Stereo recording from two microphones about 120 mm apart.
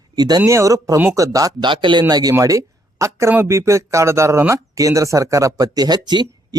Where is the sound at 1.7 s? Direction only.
40° right (ahead or behind).